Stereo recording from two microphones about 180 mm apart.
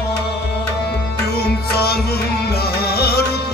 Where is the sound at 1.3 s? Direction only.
60° left (ahead or behind).